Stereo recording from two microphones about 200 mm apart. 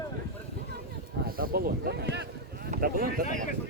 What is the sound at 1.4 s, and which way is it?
Speech, 50° right (ahead or behind).